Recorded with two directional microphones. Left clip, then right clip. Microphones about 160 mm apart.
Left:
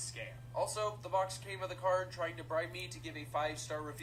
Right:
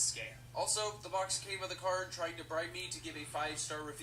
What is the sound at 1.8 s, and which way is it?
Speech, 15° left (ahead or behind).